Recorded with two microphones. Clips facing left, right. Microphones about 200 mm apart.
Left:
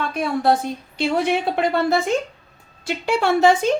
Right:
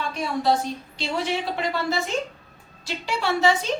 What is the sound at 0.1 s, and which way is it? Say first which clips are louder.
A woman's voice: left 3 dB; 55° left (ahead or behind).